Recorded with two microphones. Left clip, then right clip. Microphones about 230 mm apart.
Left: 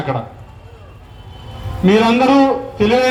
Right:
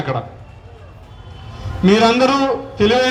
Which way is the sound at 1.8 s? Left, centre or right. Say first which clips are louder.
Even; right.